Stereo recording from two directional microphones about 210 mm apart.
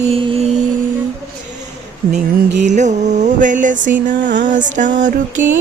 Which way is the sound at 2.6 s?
35° right (ahead or behind).